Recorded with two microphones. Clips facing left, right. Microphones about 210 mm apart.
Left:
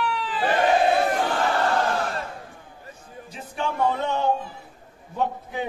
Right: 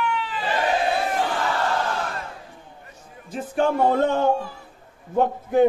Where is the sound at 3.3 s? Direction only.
50° right (ahead or behind).